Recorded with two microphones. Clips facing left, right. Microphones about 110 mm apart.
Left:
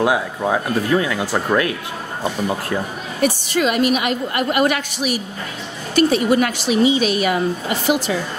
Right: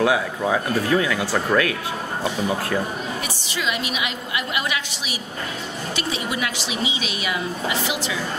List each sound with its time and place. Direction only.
0.0 s speech: 20° left (ahead or behind)
3.2 s a woman's voice: 50° left (ahead or behind)